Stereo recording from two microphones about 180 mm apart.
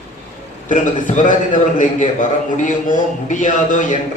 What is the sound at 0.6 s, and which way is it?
A man's voice, 45° left (ahead or behind).